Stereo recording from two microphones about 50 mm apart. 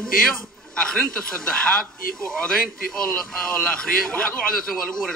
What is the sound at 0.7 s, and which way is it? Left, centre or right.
Speech, centre.